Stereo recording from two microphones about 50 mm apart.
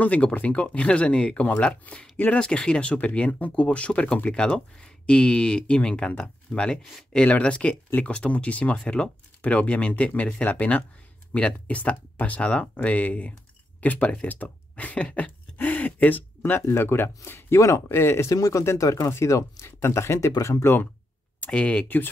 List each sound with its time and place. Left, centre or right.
0.0 s speech: left
2.4 s speech: centre; by 16.3 s left
16.7 s speech: left
17.6 s speech: left
21.5 s speech: left
21.8 s speech: left